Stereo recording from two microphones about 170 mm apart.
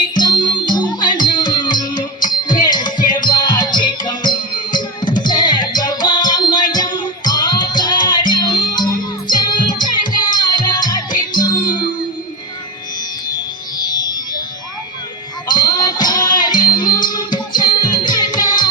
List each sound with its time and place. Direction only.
0.1 s music: 25° left (ahead or behind)
15.4 s music: 25° left (ahead or behind)